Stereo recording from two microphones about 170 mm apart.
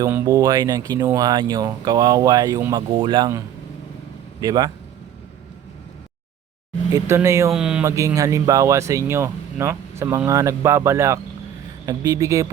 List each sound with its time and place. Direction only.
0.0 s speech: 20° right (ahead or behind)
2.7 s speech: 30° right (ahead or behind)
4.4 s speech: 20° right (ahead or behind)
6.9 s speech: 15° right (ahead or behind)
7.5 s speech: 5° right (ahead or behind)
7.9 s speech: 20° right (ahead or behind)